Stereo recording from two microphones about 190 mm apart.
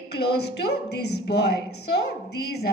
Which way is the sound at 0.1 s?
60° left (ahead or behind).